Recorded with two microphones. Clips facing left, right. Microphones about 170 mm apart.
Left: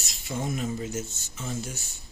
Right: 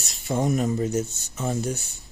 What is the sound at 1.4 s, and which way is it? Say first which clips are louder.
Speech: right 7 dB; 60° right (ahead or behind).